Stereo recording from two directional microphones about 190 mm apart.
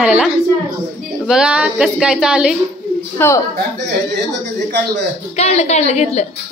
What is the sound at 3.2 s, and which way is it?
Speech, 10° left (ahead or behind).